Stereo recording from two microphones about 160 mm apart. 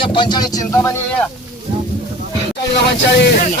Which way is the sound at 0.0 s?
30° left (ahead or behind).